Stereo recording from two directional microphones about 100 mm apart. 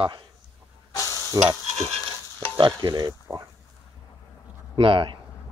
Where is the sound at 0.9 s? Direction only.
35° left (ahead or behind).